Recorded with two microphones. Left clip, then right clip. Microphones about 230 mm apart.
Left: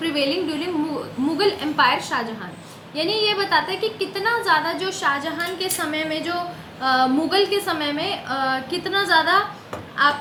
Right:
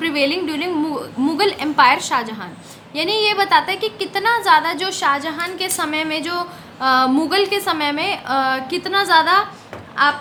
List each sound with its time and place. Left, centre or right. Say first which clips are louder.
0.0 s a woman's voice: right 3 dB; right